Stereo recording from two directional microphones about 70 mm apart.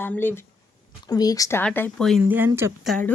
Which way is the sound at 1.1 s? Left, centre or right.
Left.